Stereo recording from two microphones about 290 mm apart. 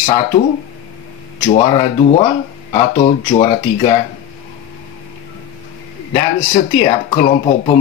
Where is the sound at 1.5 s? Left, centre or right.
Centre.